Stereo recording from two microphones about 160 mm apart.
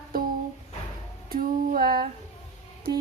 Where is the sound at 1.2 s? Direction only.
65° right (ahead or behind).